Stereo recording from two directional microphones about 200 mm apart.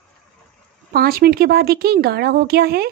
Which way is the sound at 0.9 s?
50° right (ahead or behind).